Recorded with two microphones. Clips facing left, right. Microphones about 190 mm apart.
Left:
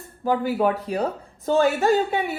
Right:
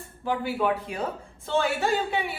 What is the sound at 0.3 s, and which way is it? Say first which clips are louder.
A woman's voice: left 5 dB; 40° left (ahead or behind).